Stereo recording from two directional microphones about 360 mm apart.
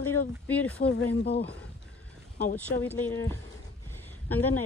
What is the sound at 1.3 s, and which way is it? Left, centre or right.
Speech, left.